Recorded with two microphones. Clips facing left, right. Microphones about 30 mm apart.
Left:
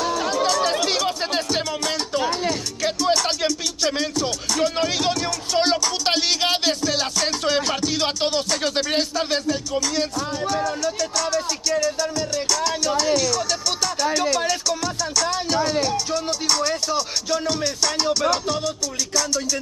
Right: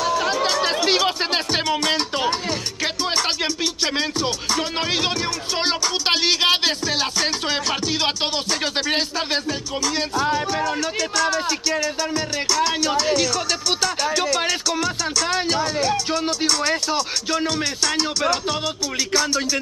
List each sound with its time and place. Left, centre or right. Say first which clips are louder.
0.0 s music: right 1 dB; right
10.1 s music: right 3 dB; right
16.3 s speech: right 1 dB; centre
16.6 s music: right 2 dB; centre